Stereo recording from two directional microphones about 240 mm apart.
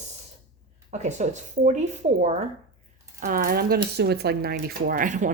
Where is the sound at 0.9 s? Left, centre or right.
Right.